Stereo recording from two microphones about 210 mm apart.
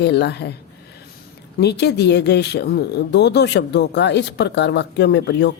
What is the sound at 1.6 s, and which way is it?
Speech, 50° left (ahead or behind).